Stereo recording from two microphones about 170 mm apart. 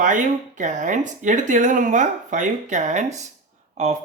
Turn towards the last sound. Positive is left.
turn(degrees=-45)  # may be behind; listen again after turning